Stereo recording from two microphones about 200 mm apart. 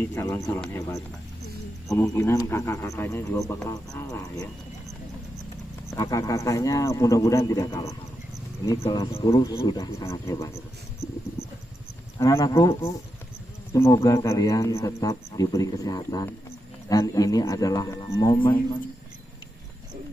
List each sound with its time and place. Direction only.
0.0 s speech: 15° left (ahead or behind)
5.9 s speech: 15° left (ahead or behind)
9.1 s speech: 30° left (ahead or behind)
9.4 s speech: 15° left (ahead or behind)
12.2 s speech: 15° left (ahead or behind)